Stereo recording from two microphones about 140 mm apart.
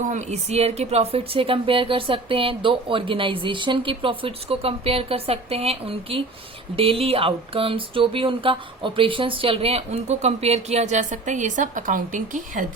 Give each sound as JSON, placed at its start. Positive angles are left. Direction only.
{"t": 0.1, "sound": "speech", "side_deg": -55}